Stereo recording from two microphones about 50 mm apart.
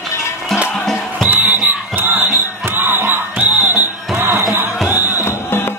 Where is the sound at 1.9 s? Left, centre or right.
Right.